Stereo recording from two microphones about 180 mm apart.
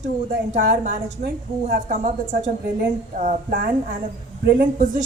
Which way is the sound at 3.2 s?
45° right (ahead or behind).